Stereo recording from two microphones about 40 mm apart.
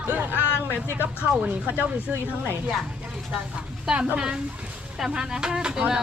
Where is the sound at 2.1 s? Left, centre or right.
Right.